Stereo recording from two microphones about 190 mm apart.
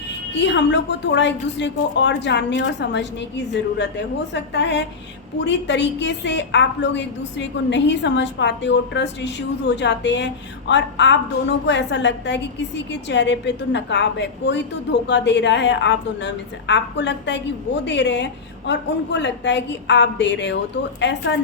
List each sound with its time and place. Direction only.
0.3 s a woman's voice: 70° left (ahead or behind)